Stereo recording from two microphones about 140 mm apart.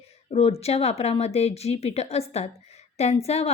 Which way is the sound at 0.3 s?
45° left (ahead or behind).